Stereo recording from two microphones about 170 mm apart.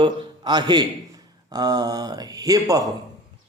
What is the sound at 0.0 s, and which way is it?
A man's voice, 25° right (ahead or behind).